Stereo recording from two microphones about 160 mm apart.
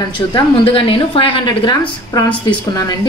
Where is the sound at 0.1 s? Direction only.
35° left (ahead or behind).